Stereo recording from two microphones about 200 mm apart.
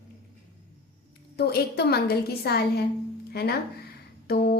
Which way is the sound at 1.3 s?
55° left (ahead or behind).